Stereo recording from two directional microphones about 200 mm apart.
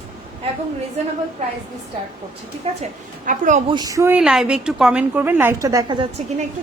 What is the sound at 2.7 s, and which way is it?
Speech, 30° right (ahead or behind).